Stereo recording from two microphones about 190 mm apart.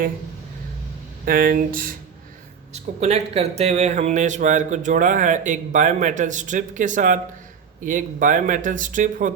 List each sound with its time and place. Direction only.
1.2 s speech: 50° right (ahead or behind)
2.7 s speech: 35° right (ahead or behind)